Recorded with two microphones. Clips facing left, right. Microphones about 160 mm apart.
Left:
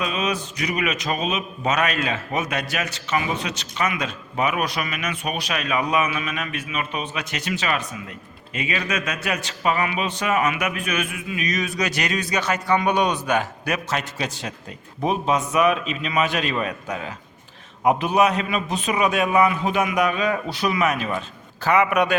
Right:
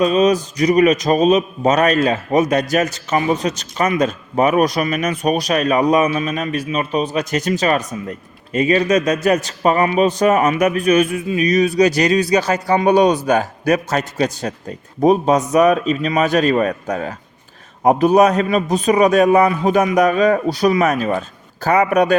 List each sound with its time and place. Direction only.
0.0 s a man's voice: 40° right (ahead or behind)